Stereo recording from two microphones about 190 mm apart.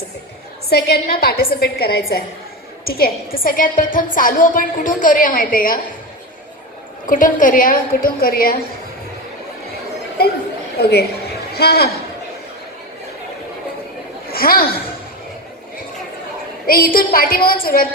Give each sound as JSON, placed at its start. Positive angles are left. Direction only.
{"t": 0.7, "sound": "a woman's voice", "side_deg": 55}
{"t": 7.1, "sound": "a woman's voice", "side_deg": 45}
{"t": 10.8, "sound": "a woman's voice", "side_deg": 60}
{"t": 14.3, "sound": "a woman's voice", "side_deg": 50}
{"t": 16.6, "sound": "a woman's voice", "side_deg": 50}